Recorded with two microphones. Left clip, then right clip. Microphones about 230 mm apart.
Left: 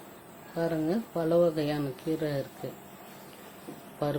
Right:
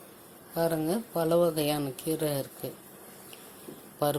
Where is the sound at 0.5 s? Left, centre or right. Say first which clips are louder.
Right 1 dB; centre.